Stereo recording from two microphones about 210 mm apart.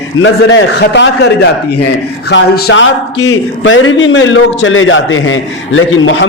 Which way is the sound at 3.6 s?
70° left (ahead or behind).